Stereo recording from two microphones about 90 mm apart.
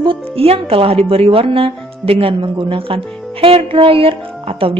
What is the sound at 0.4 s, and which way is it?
Music, 90° right.